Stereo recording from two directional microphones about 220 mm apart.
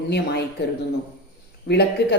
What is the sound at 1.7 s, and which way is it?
Speech, 50° left (ahead or behind).